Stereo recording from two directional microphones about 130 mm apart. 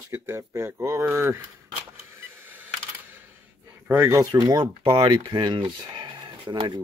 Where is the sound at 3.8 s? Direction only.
15° right (ahead or behind).